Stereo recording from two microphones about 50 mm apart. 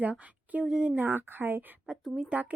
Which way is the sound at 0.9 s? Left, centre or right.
Right.